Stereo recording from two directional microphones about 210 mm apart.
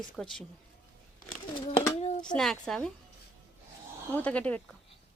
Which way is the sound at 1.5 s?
25° left (ahead or behind).